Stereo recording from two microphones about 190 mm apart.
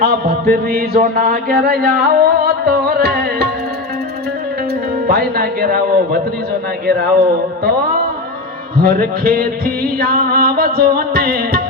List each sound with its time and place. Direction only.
0.0 s speech: 55° right (ahead or behind)
5.0 s speech: 55° right (ahead or behind)
7.6 s music: 55° right (ahead or behind)